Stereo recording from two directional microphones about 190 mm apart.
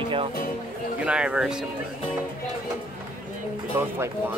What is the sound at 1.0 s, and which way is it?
Speech, 5° right (ahead or behind).